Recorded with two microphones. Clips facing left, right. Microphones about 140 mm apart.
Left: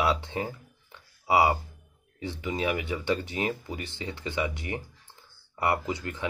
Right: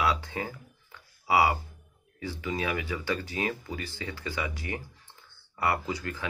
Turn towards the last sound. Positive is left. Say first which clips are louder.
# left 2 dB
turn(degrees=20)  # may be behind; listen again after turning